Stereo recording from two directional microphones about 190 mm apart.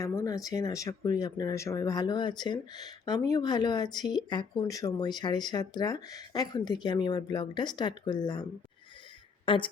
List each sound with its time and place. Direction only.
0.0 s speech: 15° left (ahead or behind)